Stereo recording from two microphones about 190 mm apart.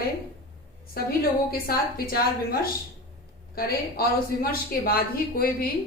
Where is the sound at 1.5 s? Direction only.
50° left (ahead or behind).